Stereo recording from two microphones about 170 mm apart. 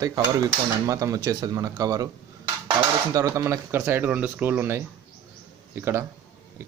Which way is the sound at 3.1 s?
20° right (ahead or behind).